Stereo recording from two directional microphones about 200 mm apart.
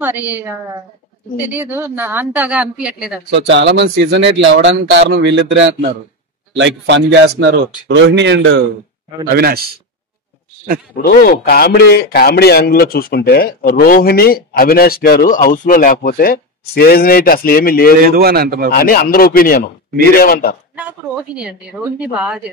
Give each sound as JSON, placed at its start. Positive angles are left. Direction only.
{"t": 0.0, "sound": "speech", "side_deg": -10}
{"t": 3.4, "sound": "speech", "side_deg": -65}
{"t": 9.3, "sound": "speech", "side_deg": -50}
{"t": 11.0, "sound": "a man's voice", "side_deg": 50}
{"t": 18.0, "sound": "speech", "side_deg": -50}
{"t": 18.7, "sound": "a man's voice", "side_deg": 50}
{"t": 21.4, "sound": "a woman's voice", "side_deg": -5}